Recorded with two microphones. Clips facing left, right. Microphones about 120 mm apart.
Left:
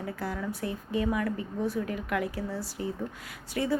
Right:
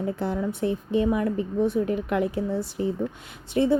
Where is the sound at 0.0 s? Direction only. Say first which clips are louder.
Right 7 dB; 25° right (ahead or behind).